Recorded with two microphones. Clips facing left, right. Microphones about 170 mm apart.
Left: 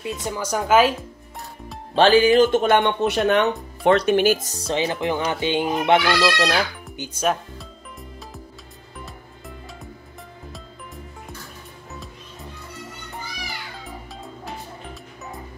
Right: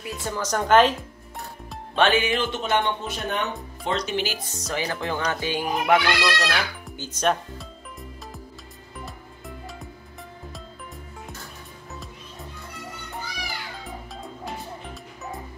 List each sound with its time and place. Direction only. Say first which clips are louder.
0.2 s a woman's voice: right 1 dB; 10° left (ahead or behind)
2.0 s speech: left 7 dB; 35° left (ahead or behind); by 3.4 s 70° left (ahead or behind)
3.8 s speech: left 10 dB; 60° left (ahead or behind); by 6.6 s 35° left (ahead or behind)
7.0 s music: left 1 dB; 10° left (ahead or behind)
13.8 s cat: even; centre (ahead or behind)